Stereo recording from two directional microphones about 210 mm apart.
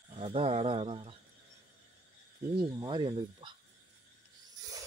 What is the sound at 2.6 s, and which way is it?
Speech, 20° right (ahead or behind).